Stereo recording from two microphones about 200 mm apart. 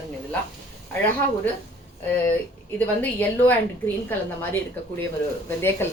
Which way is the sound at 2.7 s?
10° left (ahead or behind).